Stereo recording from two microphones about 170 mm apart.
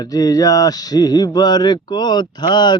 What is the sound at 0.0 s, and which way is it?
Speech, 20° left (ahead or behind).